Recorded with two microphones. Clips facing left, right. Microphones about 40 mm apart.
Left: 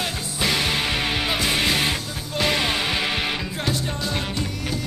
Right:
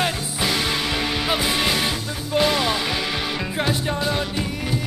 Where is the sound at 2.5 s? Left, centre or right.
Centre.